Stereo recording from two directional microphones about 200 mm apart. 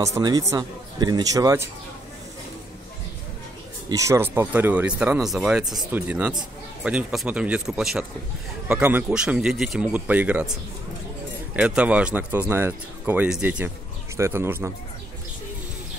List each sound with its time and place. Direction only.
0.0 s speech: 20° right (ahead or behind)
3.9 s speech: 15° right (ahead or behind)
11.5 s speech: 5° right (ahead or behind)